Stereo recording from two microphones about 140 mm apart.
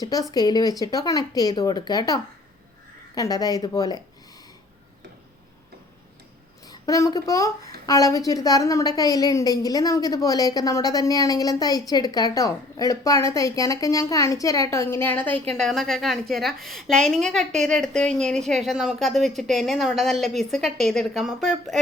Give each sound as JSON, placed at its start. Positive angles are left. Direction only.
{"t": 0.0, "sound": "a woman's voice", "side_deg": 25}
{"t": 6.7, "sound": "a woman's voice", "side_deg": 25}